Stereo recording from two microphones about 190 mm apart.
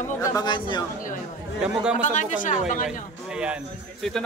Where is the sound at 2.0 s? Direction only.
40° left (ahead or behind).